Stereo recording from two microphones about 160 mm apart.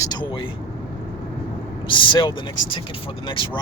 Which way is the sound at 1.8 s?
30° left (ahead or behind).